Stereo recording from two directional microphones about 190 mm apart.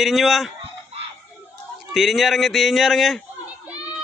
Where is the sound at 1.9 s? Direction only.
Centre (ahead or behind).